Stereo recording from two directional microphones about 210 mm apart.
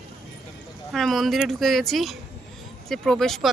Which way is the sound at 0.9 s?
Centre (ahead or behind).